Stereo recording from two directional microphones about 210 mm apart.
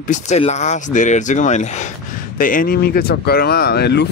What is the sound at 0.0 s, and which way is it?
Speech, 35° left (ahead or behind).